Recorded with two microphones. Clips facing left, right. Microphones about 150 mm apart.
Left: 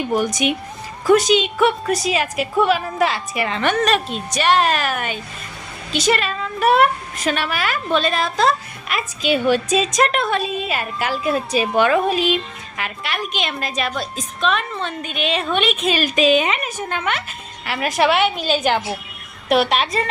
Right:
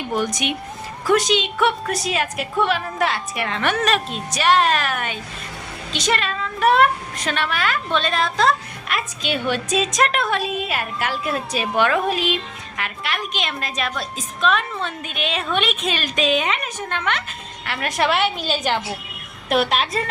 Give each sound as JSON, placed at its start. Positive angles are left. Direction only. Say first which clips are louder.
{"t": 0.1, "sound": "a woman's voice", "louder": "left 2 dB", "side_deg": 0}